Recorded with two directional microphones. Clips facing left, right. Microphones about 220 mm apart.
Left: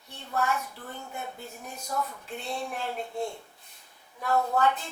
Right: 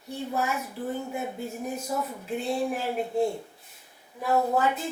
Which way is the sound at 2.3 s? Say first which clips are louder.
Right 9 dB; 5° right (ahead or behind).